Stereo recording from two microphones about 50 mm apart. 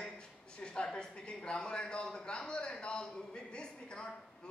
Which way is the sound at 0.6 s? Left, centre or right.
Centre.